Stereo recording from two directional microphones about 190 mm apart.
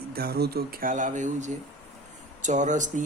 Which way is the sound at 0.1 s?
55° right (ahead or behind).